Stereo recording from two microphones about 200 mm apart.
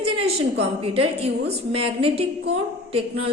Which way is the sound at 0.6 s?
30° right (ahead or behind).